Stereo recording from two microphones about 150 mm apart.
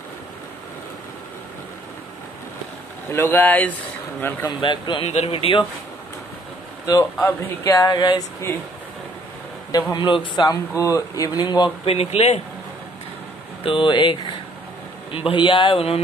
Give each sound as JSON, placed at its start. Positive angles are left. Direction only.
{"t": 3.1, "sound": "speech", "side_deg": 15}
{"t": 4.4, "sound": "speech", "side_deg": 30}
{"t": 6.9, "sound": "speech", "side_deg": 20}
{"t": 9.7, "sound": "speech", "side_deg": 25}
{"t": 11.9, "sound": "speech", "side_deg": 40}
{"t": 13.7, "sound": "speech", "side_deg": 35}